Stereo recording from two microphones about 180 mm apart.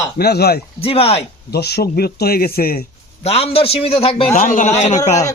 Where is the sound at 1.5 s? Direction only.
65° left (ahead or behind).